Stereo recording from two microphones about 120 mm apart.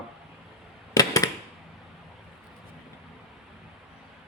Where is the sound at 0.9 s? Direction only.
30° left (ahead or behind).